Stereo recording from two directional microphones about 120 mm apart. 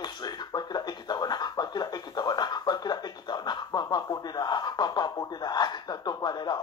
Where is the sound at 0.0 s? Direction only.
35° left (ahead or behind).